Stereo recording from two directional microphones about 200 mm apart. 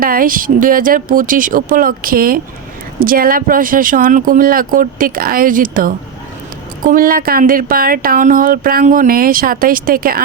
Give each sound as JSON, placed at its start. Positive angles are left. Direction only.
{"t": 0.0, "sound": "speech", "side_deg": -45}